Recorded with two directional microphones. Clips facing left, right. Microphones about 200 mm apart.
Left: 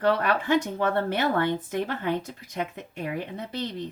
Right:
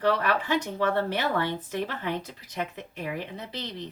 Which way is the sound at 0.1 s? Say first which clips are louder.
Left 3 dB; 50° left (ahead or behind).